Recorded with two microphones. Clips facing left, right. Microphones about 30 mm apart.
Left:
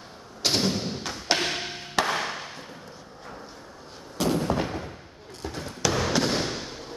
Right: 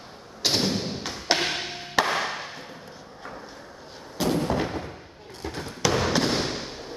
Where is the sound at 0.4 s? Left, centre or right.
Centre.